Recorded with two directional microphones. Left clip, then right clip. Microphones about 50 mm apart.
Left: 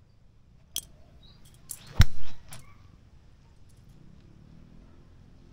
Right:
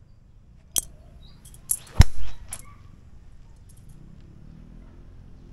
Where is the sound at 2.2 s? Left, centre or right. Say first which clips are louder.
Right 5 dB; centre.